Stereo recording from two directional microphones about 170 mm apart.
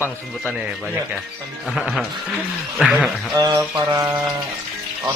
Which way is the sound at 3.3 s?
20° right (ahead or behind).